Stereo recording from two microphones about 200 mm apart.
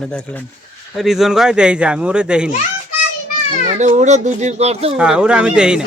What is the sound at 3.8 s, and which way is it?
Speech, 35° right (ahead or behind).